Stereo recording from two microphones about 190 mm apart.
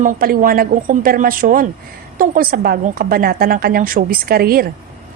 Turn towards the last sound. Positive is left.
turn(degrees=-50)  # may be behind; listen again after turning